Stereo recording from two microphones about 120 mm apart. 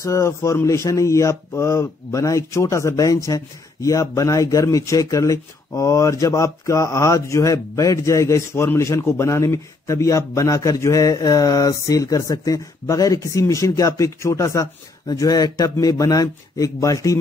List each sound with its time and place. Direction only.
0.0 s speech: 25° left (ahead or behind)